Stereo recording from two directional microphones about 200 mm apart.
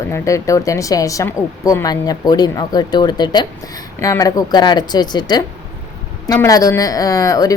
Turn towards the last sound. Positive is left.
turn(degrees=15)  # may be behind; listen again after turning